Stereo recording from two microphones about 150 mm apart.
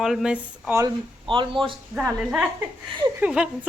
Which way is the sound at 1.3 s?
35° right (ahead or behind).